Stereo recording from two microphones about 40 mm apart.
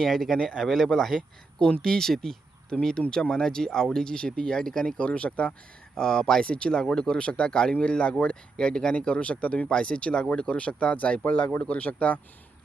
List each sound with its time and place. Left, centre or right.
0.0 s speech: centre
4.9 s speech: left
5.9 s speech: centre
6.4 s speech: left
9.6 s speech: left